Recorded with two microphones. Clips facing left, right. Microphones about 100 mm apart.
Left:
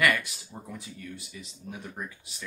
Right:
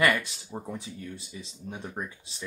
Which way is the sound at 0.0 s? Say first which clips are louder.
Right 1 dB; 30° right (ahead or behind).